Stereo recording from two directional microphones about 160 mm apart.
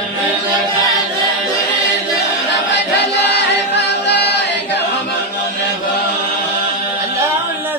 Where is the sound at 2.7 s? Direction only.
90° left.